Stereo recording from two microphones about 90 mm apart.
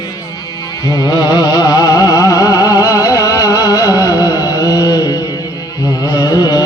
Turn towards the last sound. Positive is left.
turn(degrees=45)  # may be behind; listen again after turning